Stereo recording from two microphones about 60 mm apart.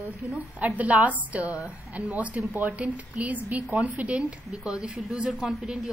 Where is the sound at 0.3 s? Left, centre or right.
Right.